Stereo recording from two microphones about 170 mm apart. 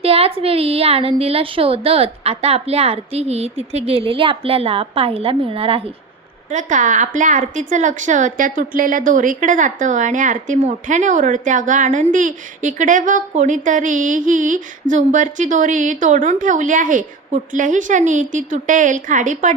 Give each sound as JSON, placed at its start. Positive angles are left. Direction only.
{"t": 0.0, "sound": "a woman's voice", "side_deg": -35}
{"t": 6.5, "sound": "a woman's voice", "side_deg": -45}